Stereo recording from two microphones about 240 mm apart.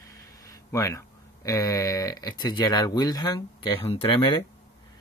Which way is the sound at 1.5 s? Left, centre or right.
Centre.